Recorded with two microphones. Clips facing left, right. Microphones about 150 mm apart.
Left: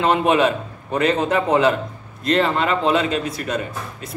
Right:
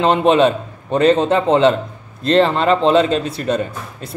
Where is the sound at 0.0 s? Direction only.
30° right (ahead or behind).